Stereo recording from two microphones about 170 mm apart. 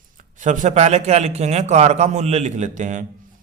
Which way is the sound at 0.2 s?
50° right (ahead or behind).